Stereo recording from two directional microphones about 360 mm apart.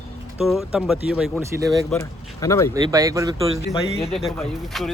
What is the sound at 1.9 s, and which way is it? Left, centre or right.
Speech, centre.